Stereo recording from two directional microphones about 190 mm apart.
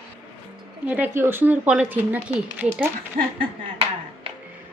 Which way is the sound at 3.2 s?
40° right (ahead or behind).